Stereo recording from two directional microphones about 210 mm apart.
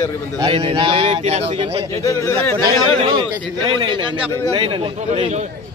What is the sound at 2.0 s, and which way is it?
Speech, 10° left (ahead or behind).